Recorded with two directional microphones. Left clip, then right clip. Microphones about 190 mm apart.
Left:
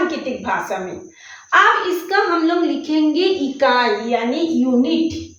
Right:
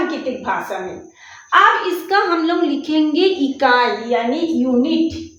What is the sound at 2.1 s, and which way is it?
A woman's voice, 30° right (ahead or behind).